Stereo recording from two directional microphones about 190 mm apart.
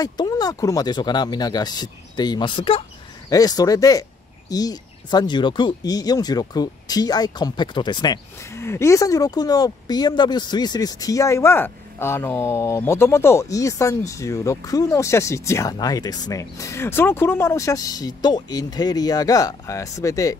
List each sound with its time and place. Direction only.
0.0 s speech: 20° left (ahead or behind)